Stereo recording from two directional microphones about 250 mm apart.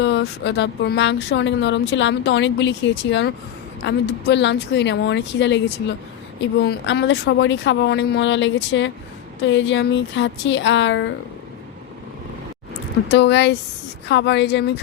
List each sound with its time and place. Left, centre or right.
0.0 s speech: left
13.1 s speech: left